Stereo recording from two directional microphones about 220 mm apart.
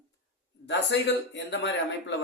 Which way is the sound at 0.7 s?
55° left (ahead or behind).